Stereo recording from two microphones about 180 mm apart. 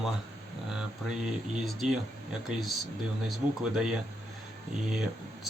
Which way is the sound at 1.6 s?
Centre (ahead or behind).